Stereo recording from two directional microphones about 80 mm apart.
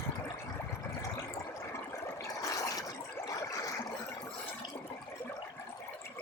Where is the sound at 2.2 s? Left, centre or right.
Left.